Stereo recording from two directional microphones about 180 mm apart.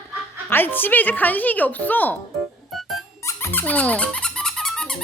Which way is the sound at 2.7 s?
Centre (ahead or behind).